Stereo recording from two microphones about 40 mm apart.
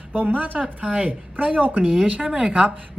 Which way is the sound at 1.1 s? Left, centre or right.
Right.